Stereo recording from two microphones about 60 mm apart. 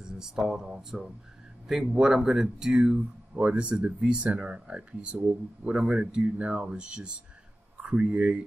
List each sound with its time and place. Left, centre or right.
0.0 s speech: centre